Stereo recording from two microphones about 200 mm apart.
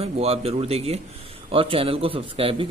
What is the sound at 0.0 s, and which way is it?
A man's voice, 30° right (ahead or behind).